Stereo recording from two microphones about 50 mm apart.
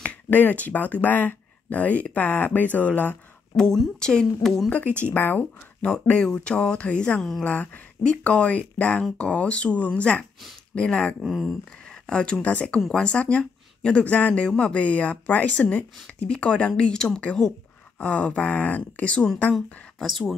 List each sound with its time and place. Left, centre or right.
0.0 s speech: left
3.5 s speech: centre
4.6 s speech: left
5.0 s speech: left
5.6 s speech: left
7.4 s speech: left
11.2 s speech: centre
11.7 s speech: centre
20.0 s speech: centre